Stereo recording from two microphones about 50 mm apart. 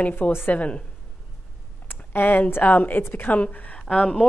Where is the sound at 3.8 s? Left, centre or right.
Centre.